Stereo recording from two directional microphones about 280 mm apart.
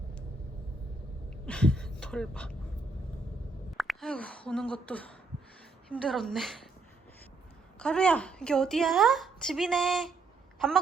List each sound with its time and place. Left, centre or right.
1.5 s speech: centre
3.7 s a woman's voice: centre
7.8 s a woman's voice: centre